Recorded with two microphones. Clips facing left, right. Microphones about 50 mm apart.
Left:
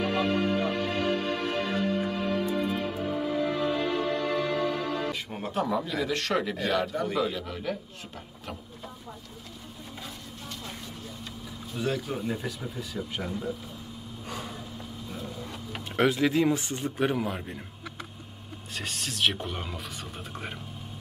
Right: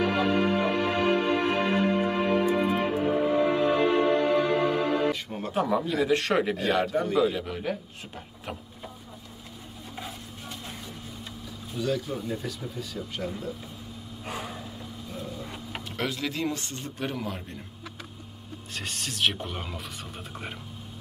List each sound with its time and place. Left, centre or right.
0.2 s music: centre
5.1 s music: centre
5.5 s a man's voice: centre
6.1 s a man's voice: centre
6.5 s a man's voice: centre
9.9 s a sound: centre
12.1 s speech: centre
14.2 s vehicle: centre
15.1 s a sound: centre
16.0 s speech: centre
18.8 s speech: centre